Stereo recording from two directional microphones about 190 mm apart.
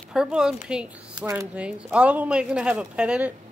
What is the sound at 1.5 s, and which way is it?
Speech, 5° right (ahead or behind).